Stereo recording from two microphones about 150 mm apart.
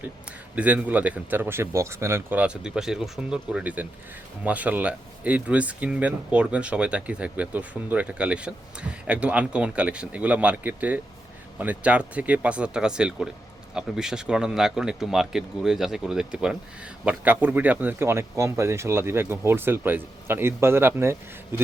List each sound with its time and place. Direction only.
0.0 s speech: 10° right (ahead or behind)